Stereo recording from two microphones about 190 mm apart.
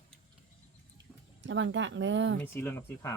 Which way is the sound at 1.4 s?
75° right (ahead or behind).